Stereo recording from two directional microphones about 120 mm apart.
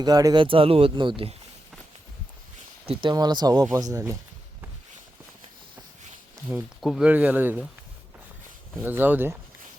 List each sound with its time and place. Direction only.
0.0 s speech: 30° right (ahead or behind)
0.3 s speech: 45° right (ahead or behind)
2.8 s speech: 55° right (ahead or behind)
3.1 s speech: 35° right (ahead or behind)
6.5 s speech: 20° right (ahead or behind)
6.8 s speech: centre (ahead or behind)
7.1 s speech: 15° right (ahead or behind)
8.8 s speech: 15° right (ahead or behind)